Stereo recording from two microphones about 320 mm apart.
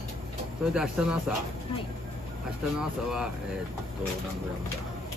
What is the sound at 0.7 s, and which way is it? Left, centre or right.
Speech, centre.